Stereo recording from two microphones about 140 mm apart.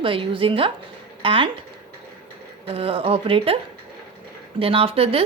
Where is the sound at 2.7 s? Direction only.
40° right (ahead or behind).